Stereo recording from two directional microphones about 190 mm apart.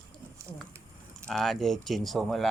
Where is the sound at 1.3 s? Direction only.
Centre (ahead or behind).